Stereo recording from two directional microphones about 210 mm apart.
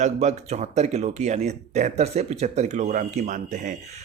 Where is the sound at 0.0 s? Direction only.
35° right (ahead or behind).